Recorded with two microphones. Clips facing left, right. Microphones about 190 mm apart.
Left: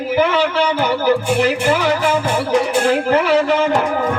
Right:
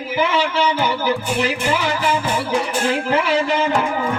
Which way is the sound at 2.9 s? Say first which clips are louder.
Left 3 dB; 50° left (ahead or behind).